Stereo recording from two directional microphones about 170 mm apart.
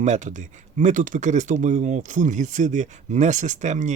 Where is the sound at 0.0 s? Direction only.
45° right (ahead or behind).